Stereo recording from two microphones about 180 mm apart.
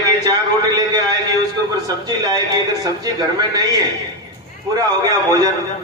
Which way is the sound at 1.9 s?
20° right (ahead or behind).